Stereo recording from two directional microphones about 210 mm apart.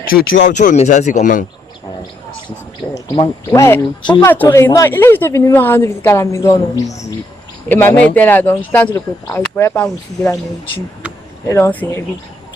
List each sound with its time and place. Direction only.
0.1 s speech: 45° left (ahead or behind)
2.9 s speech: 15° left (ahead or behind)
11.4 s speech: 10° left (ahead or behind)